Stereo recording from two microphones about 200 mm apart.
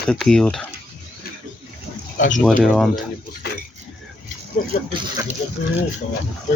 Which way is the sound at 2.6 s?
Centre (ahead or behind).